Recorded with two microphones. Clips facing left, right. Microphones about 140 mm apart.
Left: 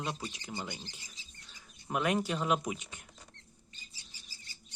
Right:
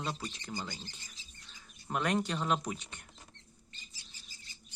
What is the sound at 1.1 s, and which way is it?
Speech, centre (ahead or behind).